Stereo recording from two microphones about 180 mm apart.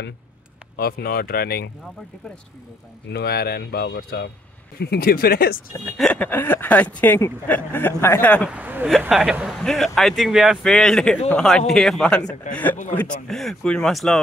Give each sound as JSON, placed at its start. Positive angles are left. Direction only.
{"t": 0.7, "sound": "speech", "side_deg": 55}
{"t": 3.1, "sound": "speech", "side_deg": 65}
{"t": 5.9, "sound": "speech", "side_deg": 5}
{"t": 8.5, "sound": "speech", "side_deg": -10}
{"t": 12.2, "sound": "a man's voice", "side_deg": 40}
{"t": 13.3, "sound": "speech", "side_deg": 0}